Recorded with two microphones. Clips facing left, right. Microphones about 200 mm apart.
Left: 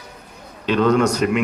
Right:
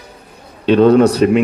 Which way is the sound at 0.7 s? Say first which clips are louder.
Right 7 dB; 30° right (ahead or behind).